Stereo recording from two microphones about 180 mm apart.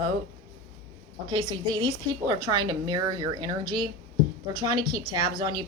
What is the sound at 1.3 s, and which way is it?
A woman's voice, 25° right (ahead or behind).